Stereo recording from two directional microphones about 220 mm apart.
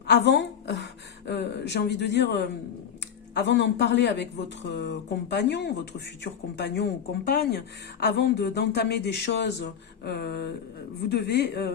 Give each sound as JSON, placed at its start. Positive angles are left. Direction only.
{"t": 0.1, "sound": "a woman's voice", "side_deg": 50}